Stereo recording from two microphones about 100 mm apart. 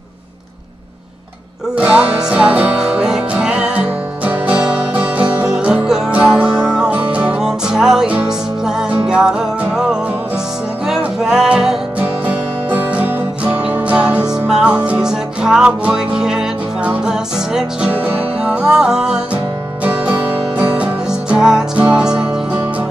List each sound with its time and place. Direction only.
1.8 s music: 10° right (ahead or behind)